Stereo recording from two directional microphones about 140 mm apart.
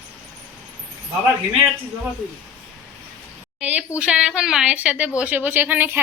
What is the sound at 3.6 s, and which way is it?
A woman's voice, 10° right (ahead or behind).